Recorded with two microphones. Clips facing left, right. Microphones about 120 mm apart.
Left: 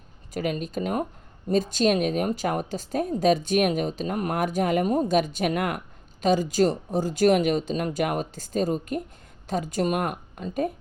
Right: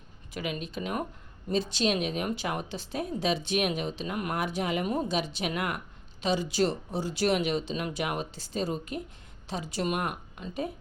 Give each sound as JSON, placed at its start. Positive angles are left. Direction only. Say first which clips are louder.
{"t": 0.3, "sound": "speech", "louder": "left 6 dB", "side_deg": 45}